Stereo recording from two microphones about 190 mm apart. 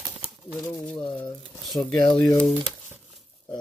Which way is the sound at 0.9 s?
Centre (ahead or behind).